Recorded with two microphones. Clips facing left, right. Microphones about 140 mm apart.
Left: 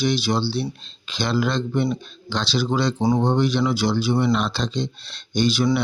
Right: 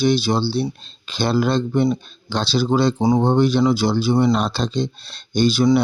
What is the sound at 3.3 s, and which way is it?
Speech, 35° right (ahead or behind).